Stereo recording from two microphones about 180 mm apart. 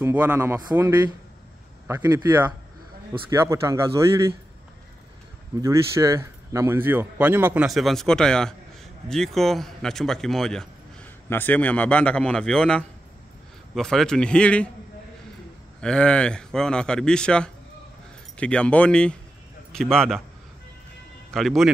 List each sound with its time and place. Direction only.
0.0 s a man's voice: 10° right (ahead or behind)
1.9 s a man's voice: 15° right (ahead or behind)
5.6 s a man's voice: 15° right (ahead or behind); by 14.7 s 5° left (ahead or behind)
15.8 s a man's voice: 5° left (ahead or behind)
21.3 s a man's voice: centre (ahead or behind)